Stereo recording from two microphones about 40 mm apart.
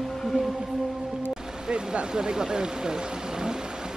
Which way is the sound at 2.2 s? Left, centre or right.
Centre.